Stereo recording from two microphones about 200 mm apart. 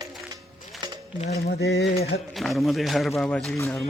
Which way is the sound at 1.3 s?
50° left (ahead or behind).